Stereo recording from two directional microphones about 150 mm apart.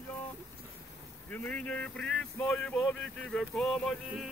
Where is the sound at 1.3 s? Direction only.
10° left (ahead or behind).